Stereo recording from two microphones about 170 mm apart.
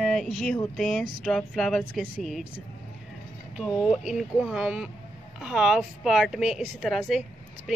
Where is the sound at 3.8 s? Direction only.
5° right (ahead or behind).